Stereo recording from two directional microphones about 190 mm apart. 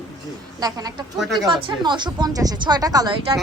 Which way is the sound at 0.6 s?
20° right (ahead or behind).